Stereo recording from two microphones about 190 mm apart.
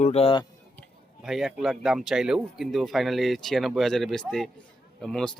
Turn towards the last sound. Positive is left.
turn(degrees=5)  # may be behind; listen again after turning